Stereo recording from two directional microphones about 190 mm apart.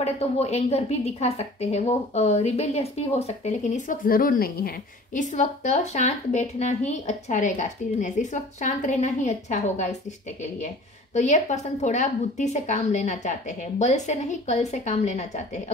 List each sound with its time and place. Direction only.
0.0 s a woman's voice: 35° left (ahead or behind)
11.1 s a woman's voice: 40° left (ahead or behind)